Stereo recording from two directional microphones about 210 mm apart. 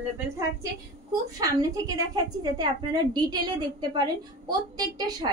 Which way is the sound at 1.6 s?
15° right (ahead or behind).